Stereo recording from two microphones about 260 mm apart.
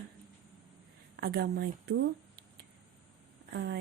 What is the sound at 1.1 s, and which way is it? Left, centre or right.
Speech, right.